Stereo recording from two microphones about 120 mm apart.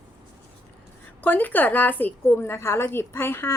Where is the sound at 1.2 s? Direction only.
15° left (ahead or behind).